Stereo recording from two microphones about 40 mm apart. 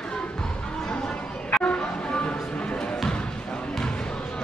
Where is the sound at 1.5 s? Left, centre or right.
Left.